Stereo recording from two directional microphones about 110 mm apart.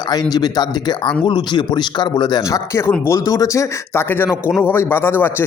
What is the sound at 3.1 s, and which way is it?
Speech, 30° left (ahead or behind).